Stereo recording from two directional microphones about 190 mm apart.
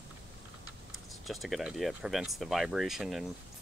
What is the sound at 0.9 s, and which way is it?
Speech, centre (ahead or behind).